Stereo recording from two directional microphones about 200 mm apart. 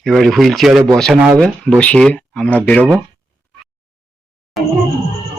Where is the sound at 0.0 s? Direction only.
Centre (ahead or behind).